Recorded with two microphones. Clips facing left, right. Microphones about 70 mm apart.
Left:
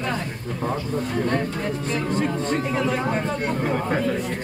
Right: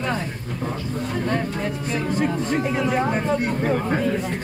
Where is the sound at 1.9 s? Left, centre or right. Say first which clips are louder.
Right 2 dB; centre.